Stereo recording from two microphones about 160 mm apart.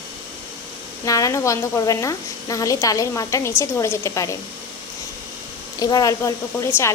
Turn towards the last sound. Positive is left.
turn(degrees=20)  # may be behind; listen again after turning